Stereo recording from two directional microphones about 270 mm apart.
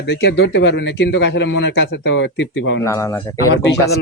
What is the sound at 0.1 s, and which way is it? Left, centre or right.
Speech, left.